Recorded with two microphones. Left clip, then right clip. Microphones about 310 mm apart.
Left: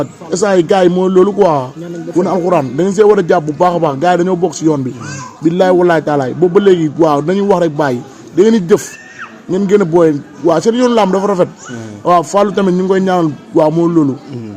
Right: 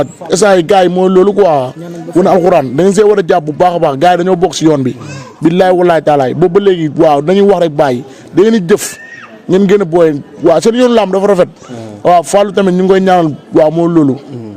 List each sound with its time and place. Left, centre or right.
0.0 s a man's voice: right